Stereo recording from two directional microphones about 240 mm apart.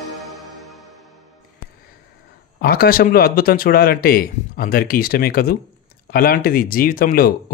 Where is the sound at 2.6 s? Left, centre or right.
Left.